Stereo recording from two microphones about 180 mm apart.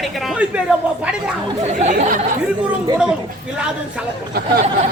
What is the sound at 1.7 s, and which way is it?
Speech, 40° right (ahead or behind).